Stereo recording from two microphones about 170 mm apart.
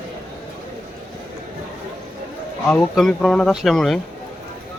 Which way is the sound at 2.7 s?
5° left (ahead or behind).